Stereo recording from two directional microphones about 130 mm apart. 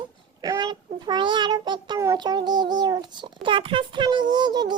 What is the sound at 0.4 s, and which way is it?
A child's voice, 30° right (ahead or behind).